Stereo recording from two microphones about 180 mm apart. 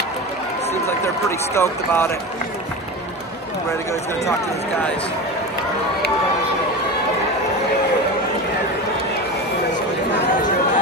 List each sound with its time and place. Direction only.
1.0 s speech: 15° left (ahead or behind)